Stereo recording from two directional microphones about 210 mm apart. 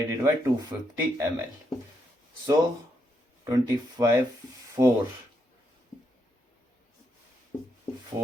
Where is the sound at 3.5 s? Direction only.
15° right (ahead or behind).